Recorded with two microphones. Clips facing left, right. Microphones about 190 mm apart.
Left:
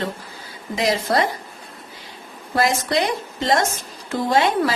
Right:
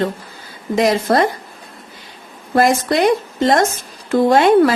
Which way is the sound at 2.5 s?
50° right (ahead or behind).